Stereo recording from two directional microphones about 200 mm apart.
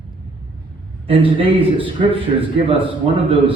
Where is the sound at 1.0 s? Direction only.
25° right (ahead or behind).